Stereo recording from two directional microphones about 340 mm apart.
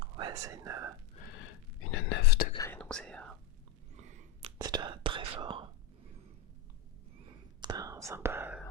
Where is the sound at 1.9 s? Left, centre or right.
Left.